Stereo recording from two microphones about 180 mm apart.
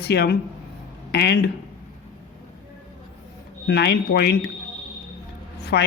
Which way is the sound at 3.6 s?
70° left (ahead or behind).